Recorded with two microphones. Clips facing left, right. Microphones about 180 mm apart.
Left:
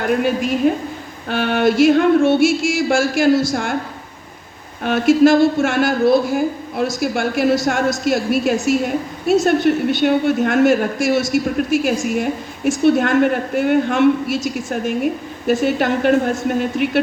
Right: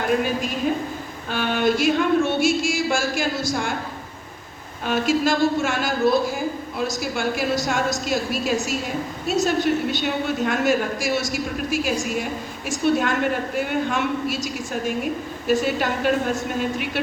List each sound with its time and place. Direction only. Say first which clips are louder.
0.6 s a woman's voice: left 6 dB; 55° left (ahead or behind)
4.8 s a man's voice: left 8 dB; 50° left (ahead or behind)